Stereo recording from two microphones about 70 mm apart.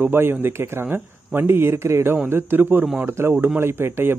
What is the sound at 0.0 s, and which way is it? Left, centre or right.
A man's voice, right.